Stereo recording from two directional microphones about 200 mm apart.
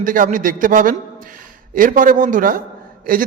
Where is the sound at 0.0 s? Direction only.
40° right (ahead or behind).